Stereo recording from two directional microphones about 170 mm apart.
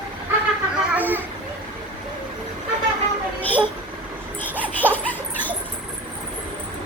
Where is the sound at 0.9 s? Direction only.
10° right (ahead or behind).